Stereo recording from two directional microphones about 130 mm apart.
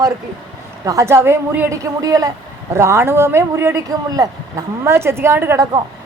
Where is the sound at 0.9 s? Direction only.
20° right (ahead or behind).